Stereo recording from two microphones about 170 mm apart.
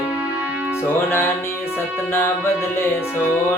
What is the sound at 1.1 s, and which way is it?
Music, 15° left (ahead or behind).